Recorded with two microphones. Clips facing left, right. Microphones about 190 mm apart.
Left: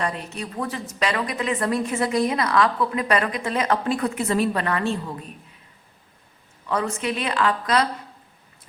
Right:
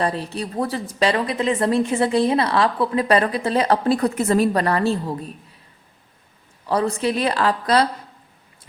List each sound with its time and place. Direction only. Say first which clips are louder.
0.0 s a woman's voice: right 5 dB; 35° right (ahead or behind)
6.7 s a woman's voice: right 4 dB; 35° right (ahead or behind)